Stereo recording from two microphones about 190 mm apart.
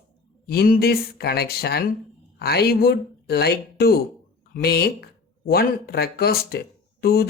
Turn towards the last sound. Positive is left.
turn(degrees=55)  # may be behind; listen again after turning